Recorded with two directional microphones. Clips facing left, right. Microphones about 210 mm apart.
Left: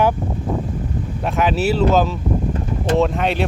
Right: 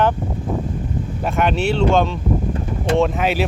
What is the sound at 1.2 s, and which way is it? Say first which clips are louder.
Speech: left 1 dB; centre (ahead or behind).